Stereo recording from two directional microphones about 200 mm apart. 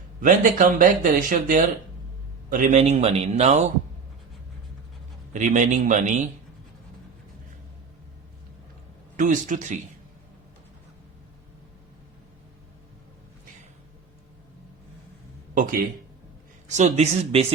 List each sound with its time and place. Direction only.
0.2 s speech: 40° right (ahead or behind)
5.3 s speech: 40° right (ahead or behind)
9.1 s speech: 40° right (ahead or behind)
15.5 s speech: 45° right (ahead or behind)